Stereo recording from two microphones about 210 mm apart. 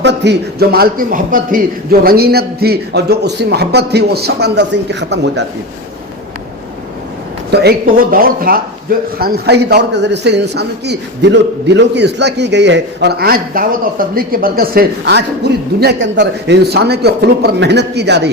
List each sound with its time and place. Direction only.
0.0 s a man's voice: 55° right (ahead or behind)
7.5 s a man's voice: 50° right (ahead or behind)